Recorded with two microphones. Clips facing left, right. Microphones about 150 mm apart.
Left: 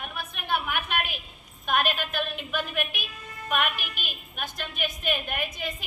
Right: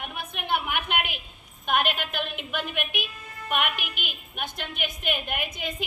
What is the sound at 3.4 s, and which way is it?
Speech, 15° right (ahead or behind).